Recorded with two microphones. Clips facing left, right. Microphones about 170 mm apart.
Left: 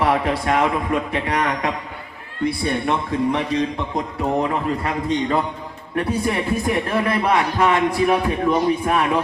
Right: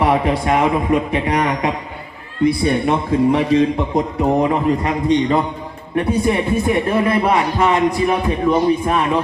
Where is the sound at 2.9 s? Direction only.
25° right (ahead or behind).